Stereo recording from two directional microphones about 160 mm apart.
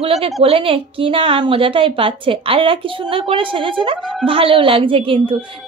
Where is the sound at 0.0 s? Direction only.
40° right (ahead or behind).